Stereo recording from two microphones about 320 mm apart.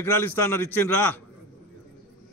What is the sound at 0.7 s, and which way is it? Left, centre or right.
Speech, left.